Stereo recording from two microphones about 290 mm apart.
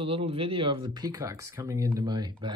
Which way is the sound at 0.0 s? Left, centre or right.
Centre.